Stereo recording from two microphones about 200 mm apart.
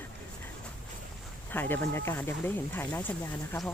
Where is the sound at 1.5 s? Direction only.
10° left (ahead or behind).